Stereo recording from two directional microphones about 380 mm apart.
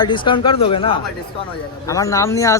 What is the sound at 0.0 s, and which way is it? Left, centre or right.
Speech, centre.